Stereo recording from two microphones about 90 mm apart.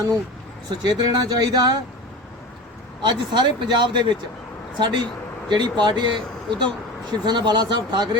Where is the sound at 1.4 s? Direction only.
45° right (ahead or behind).